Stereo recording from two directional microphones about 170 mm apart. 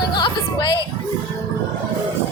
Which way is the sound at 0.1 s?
25° left (ahead or behind).